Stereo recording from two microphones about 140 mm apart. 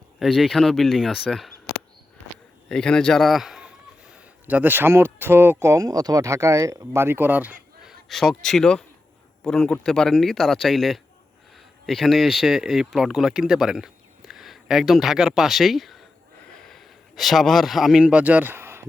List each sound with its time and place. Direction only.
0.2 s speech: centre (ahead or behind)
2.6 s a man's voice: 5° left (ahead or behind); by 7.9 s 10° right (ahead or behind)
8.0 s speech: 5° left (ahead or behind)
16.5 s a sound: centre (ahead or behind); by 18.9 s 15° right (ahead or behind)